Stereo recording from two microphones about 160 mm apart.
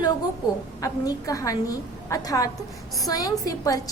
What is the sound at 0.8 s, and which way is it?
A woman's voice, 20° left (ahead or behind).